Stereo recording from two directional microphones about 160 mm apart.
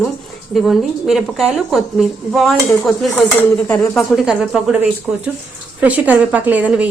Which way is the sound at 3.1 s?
10° left (ahead or behind).